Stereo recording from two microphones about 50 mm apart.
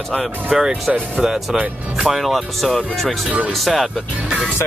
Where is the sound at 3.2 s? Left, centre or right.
Right.